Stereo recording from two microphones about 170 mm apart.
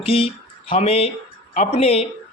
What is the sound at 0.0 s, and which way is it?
Speech, 35° left (ahead or behind).